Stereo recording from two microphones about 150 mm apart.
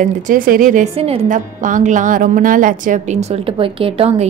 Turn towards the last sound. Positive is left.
turn(degrees=-40)  # may be behind; listen again after turning